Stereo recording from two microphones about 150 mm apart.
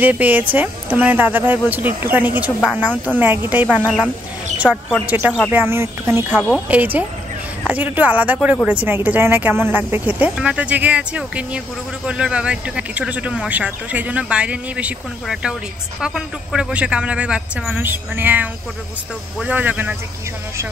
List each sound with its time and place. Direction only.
0.0 s speech: 10° right (ahead or behind)